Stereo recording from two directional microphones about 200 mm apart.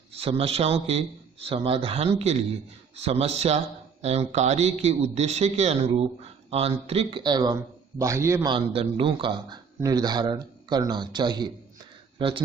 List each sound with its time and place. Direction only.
0.1 s a man's voice: 30° right (ahead or behind); by 8.5 s 15° right (ahead or behind)
8.5 s speech: 25° right (ahead or behind)